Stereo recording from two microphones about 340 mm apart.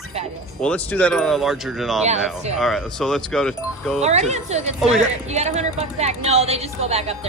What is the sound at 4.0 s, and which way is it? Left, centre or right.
A woman's voice, centre.